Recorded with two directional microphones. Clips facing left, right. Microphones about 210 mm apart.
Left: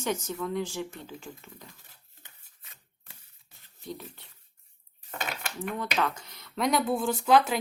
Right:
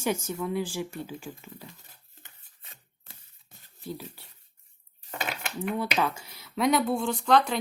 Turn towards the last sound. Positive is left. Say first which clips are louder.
# left 1 dB
turn(degrees=5)  # may be behind; listen again after turning